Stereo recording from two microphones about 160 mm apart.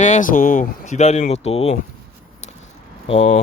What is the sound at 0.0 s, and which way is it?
Speech, 50° left (ahead or behind).